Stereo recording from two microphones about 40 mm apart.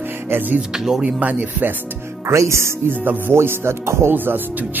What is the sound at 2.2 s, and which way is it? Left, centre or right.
Speech, right.